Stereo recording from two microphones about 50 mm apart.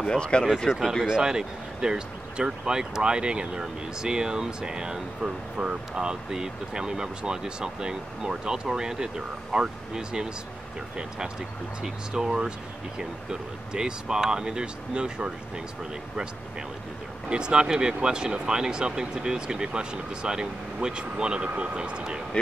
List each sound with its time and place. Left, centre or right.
0.0 s speech: centre
1.0 s speech: centre
11.8 s speech: centre
17.3 s speech: centre